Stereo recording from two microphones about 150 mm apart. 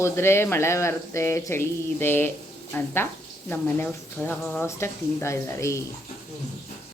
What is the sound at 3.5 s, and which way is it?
Speech, 15° left (ahead or behind).